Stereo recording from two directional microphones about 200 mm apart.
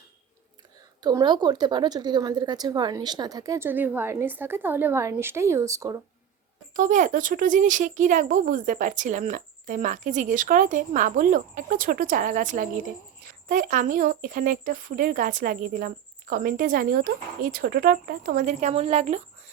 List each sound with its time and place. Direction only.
1.0 s a woman's voice: 20° right (ahead or behind)
6.7 s speech: 40° right (ahead or behind)